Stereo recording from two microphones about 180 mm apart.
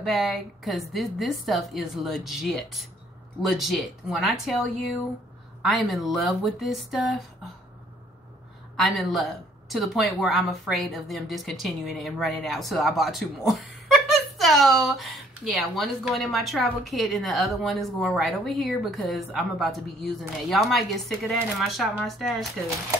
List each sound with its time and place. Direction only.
0.0 s speech: centre (ahead or behind)
5.6 s speech: centre (ahead or behind)
8.7 s speech: centre (ahead or behind)